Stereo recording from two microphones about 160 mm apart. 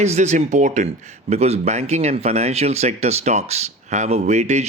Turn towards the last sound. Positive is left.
turn(degrees=-45)  # may be behind; listen again after turning